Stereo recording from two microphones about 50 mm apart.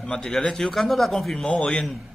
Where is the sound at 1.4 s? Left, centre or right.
Left.